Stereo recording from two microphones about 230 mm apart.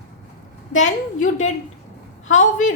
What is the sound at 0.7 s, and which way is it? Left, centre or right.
A woman's voice, left.